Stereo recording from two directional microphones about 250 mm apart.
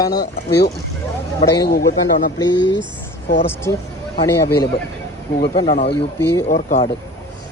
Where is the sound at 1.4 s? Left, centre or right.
Centre.